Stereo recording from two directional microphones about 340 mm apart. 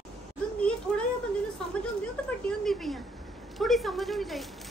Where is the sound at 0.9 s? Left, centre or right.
Centre.